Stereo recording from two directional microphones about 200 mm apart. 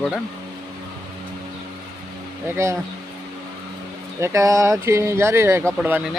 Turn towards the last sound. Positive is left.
turn(degrees=-10)  # may be behind; listen again after turning